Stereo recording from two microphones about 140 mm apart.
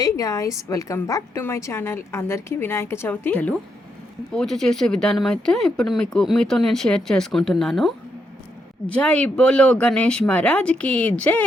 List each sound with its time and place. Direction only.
0.0 s a woman's voice: 25° left (ahead or behind); by 7.9 s centre (ahead or behind)
9.0 s a woman's voice: 10° left (ahead or behind)